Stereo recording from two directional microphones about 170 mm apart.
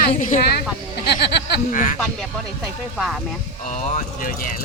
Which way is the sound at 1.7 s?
50° left (ahead or behind).